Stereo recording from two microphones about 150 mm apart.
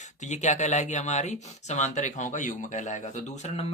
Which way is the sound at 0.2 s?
50° left (ahead or behind).